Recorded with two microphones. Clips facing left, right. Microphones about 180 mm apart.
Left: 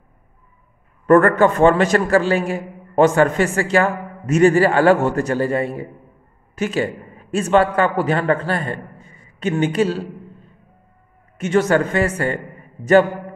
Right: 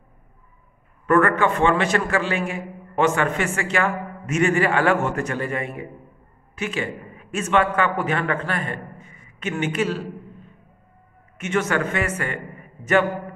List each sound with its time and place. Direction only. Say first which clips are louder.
1.0 s a man's voice: left 6 dB; 40° left (ahead or behind)